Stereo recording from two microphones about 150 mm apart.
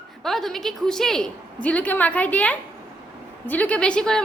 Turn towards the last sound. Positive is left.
turn(degrees=5)  # may be behind; listen again after turning